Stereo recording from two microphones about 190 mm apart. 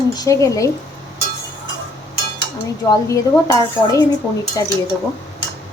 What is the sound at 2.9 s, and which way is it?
Dishes, 15° left (ahead or behind).